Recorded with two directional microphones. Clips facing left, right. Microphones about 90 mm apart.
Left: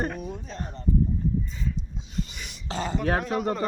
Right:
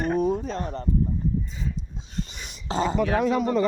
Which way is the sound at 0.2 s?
40° right (ahead or behind).